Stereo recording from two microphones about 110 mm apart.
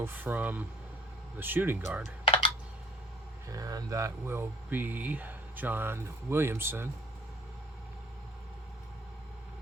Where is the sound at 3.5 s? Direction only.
35° right (ahead or behind).